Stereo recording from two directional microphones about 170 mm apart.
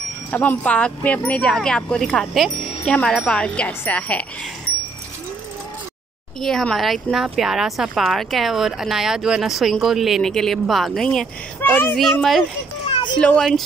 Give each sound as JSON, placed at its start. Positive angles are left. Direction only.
{"t": 0.3, "sound": "speech", "side_deg": 10}
{"t": 6.4, "sound": "speech", "side_deg": 5}
{"t": 12.0, "sound": "speech", "side_deg": 0}
{"t": 12.8, "sound": "a sound", "side_deg": 30}
{"t": 13.2, "sound": "speech", "side_deg": 5}